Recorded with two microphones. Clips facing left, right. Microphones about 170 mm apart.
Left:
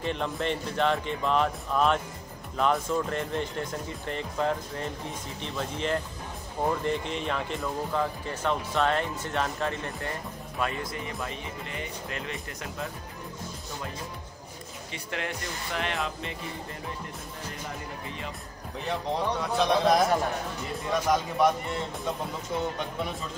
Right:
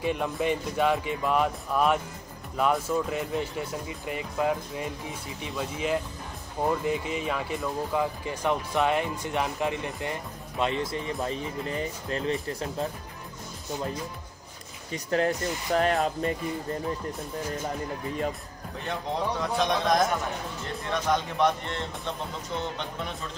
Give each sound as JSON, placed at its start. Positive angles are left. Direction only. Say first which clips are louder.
{"t": 0.0, "sound": "speech", "louder": "right 2 dB", "side_deg": -10}
{"t": 14.9, "sound": "speech", "louder": "right 9 dB", "side_deg": -40}
{"t": 19.4, "sound": "a man's voice", "louder": "left 3 dB", "side_deg": 0}